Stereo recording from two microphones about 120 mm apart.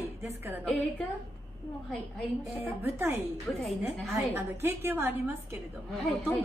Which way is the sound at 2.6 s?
20° right (ahead or behind).